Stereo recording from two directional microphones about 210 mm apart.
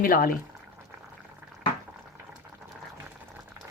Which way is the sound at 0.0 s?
45° left (ahead or behind).